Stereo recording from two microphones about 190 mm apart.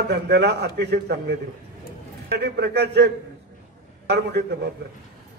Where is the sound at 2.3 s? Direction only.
60° right (ahead or behind).